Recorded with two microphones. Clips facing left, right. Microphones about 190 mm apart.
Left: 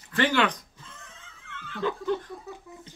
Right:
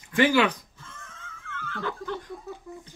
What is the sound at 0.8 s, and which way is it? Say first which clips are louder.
Wheeze: right 2 dB; 20° left (ahead or behind).